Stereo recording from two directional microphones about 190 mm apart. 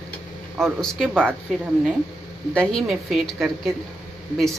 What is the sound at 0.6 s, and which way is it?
A woman's voice, 5° left (ahead or behind).